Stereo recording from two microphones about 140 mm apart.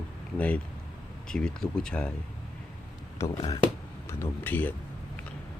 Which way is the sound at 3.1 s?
20° left (ahead or behind).